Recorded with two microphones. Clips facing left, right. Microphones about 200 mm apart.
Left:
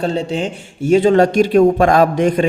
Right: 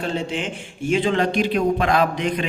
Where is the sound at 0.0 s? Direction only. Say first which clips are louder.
Left 6 dB; 35° left (ahead or behind).